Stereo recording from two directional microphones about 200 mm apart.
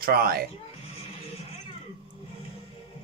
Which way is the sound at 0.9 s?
30° left (ahead or behind).